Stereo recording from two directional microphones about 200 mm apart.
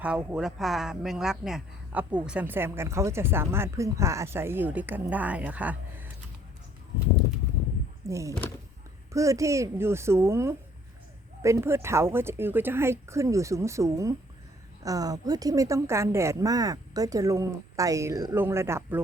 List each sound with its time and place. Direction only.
0.0 s speech: 10° right (ahead or behind)
8.0 s speech: 15° right (ahead or behind)